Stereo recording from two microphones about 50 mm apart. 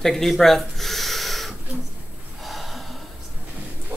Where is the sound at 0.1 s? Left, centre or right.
Centre.